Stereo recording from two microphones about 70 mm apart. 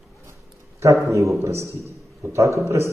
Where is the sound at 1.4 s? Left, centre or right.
Right.